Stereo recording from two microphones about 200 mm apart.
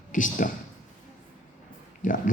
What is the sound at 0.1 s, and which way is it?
Speech, 40° left (ahead or behind).